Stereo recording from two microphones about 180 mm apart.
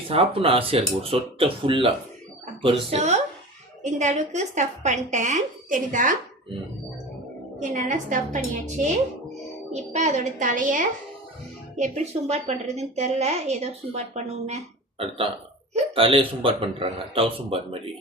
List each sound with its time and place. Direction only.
0.1 s a woman's voice: 30° right (ahead or behind)
2.9 s a woman's voice: 40° right (ahead or behind)
7.6 s a woman's voice: 45° right (ahead or behind)